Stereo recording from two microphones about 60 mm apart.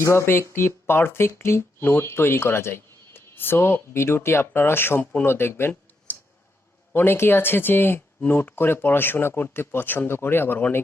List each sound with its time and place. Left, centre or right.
0.0 s speech: left